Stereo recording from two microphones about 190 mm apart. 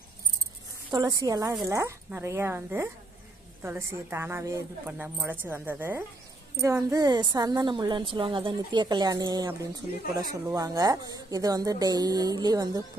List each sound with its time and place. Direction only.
0.8 s a woman's voice: 20° right (ahead or behind)